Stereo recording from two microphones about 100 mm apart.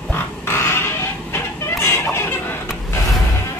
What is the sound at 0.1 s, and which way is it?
Music, 25° left (ahead or behind).